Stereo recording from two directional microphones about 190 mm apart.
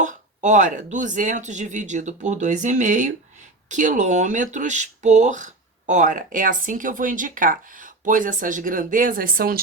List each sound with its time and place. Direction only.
0.0 s speech: 40° right (ahead or behind)